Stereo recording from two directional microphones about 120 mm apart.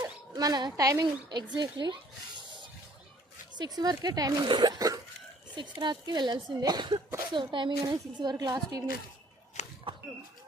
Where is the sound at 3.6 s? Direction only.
35° right (ahead or behind).